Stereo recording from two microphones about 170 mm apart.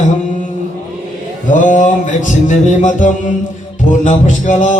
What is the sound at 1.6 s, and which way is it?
Mantra, 45° left (ahead or behind).